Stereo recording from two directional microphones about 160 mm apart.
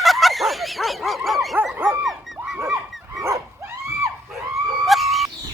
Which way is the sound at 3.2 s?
15° right (ahead or behind).